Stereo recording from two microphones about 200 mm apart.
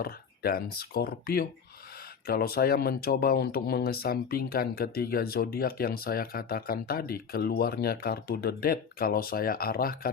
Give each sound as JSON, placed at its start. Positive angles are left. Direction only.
{"t": 0.0, "sound": "speech", "side_deg": 50}